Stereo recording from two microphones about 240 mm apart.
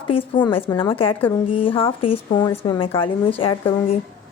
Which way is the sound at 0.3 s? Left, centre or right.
Centre.